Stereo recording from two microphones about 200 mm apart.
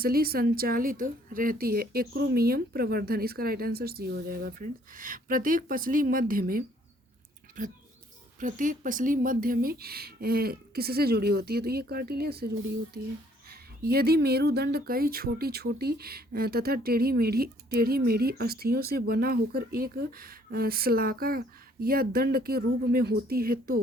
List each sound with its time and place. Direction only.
0.0 s speech: 50° right (ahead or behind)
13.5 s speech: 50° right (ahead or behind)